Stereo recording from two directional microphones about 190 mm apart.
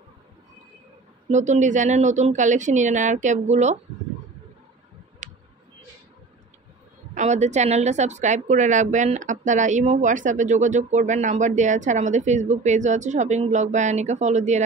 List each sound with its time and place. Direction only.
1.3 s a woman's voice: 40° right (ahead or behind)
5.2 s a sound: 40° right (ahead or behind)
7.2 s a woman's voice: 35° right (ahead or behind)